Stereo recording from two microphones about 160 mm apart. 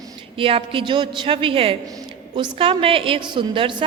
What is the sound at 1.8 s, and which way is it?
A woman's voice, 25° right (ahead or behind).